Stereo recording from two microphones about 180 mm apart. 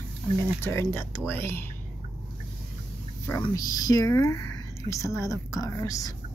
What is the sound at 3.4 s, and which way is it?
A woman's voice, 20° left (ahead or behind).